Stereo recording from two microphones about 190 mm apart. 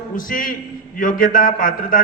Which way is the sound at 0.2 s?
45° left (ahead or behind).